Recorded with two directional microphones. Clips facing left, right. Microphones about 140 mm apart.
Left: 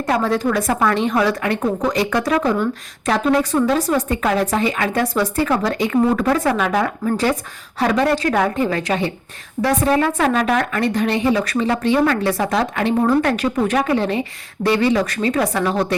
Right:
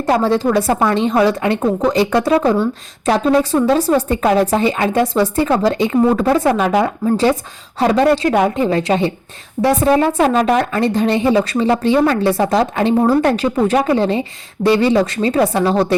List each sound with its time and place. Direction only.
0.0 s a woman's voice: 30° right (ahead or behind)